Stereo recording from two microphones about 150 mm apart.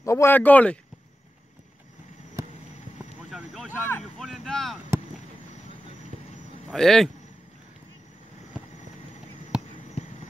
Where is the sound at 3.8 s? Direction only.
15° left (ahead or behind).